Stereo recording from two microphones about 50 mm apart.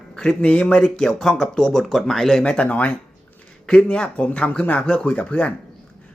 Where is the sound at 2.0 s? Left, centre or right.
Centre.